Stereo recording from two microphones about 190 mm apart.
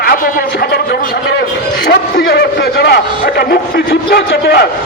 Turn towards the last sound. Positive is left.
turn(degrees=55)  # may be behind; listen again after turning